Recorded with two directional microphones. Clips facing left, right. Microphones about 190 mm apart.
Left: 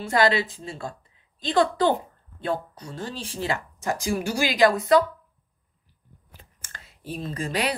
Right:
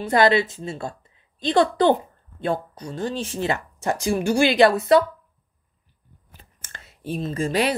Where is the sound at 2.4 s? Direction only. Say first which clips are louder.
Right 3 dB; 20° right (ahead or behind).